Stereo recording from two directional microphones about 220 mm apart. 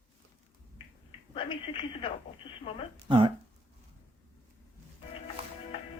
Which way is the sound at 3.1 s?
25° right (ahead or behind).